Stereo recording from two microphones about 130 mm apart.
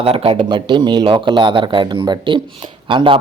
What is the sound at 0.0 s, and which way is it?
Speech, 45° right (ahead or behind).